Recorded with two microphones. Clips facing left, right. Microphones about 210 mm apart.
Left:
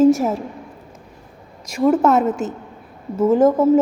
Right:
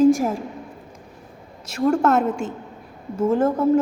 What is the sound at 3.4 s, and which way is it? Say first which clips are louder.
Speech: left 5 dB; 90° left.